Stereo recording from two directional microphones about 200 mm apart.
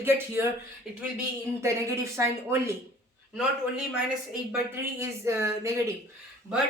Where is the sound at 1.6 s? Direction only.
15° right (ahead or behind).